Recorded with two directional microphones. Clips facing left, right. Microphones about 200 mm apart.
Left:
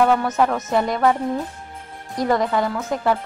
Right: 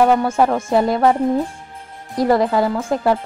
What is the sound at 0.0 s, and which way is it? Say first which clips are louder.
Speech: right 3 dB; 25° right (ahead or behind).